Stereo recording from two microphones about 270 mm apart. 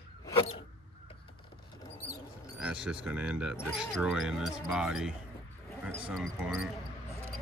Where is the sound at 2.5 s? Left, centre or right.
Centre.